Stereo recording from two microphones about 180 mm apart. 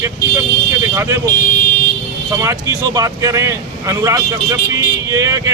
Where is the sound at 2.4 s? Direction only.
20° right (ahead or behind).